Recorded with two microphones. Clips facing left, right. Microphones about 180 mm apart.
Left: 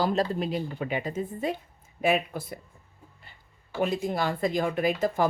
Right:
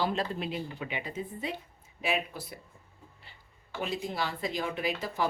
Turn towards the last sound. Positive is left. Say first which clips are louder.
# left 7 dB
turn(degrees=50)  # may be behind; listen again after turning